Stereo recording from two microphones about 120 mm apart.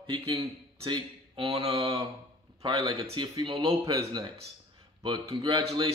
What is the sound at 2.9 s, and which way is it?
Speech, 50° right (ahead or behind).